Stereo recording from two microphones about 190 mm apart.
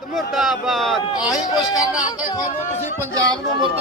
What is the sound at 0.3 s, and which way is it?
Speech, centre (ahead or behind).